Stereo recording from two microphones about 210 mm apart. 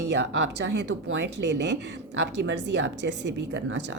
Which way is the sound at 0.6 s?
55° right (ahead or behind).